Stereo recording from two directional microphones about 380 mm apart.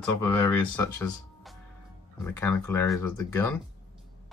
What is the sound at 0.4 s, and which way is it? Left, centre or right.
Speech, centre.